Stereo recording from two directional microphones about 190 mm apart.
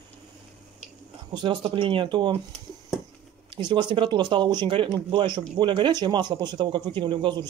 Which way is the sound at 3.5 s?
25° right (ahead or behind).